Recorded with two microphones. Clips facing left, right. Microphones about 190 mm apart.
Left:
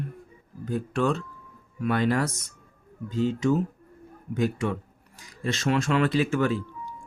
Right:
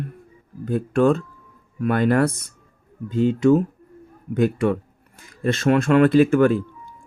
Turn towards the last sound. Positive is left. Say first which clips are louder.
# right 9 dB
turn(degrees=-55)  # may be behind; listen again after turning